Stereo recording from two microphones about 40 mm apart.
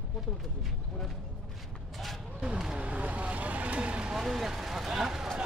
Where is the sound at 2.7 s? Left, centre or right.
Right.